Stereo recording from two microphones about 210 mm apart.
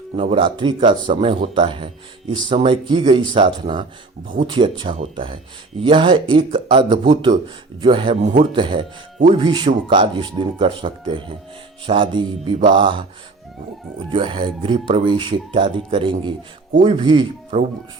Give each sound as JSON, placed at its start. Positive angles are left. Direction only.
{"t": 0.2, "sound": "speech", "side_deg": -25}
{"t": 14.1, "sound": "speech", "side_deg": -25}